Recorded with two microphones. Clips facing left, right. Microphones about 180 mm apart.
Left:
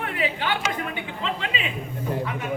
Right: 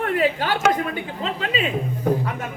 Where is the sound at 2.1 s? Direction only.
65° right (ahead or behind).